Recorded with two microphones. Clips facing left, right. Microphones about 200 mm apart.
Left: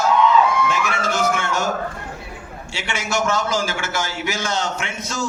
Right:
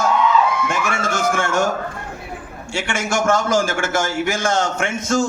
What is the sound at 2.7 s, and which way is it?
A man's voice, 50° right (ahead or behind).